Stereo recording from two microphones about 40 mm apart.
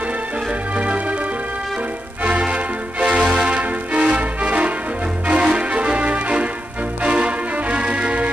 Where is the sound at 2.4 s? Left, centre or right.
Right.